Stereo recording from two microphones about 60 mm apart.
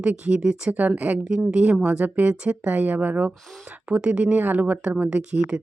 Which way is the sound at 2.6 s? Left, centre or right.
Right.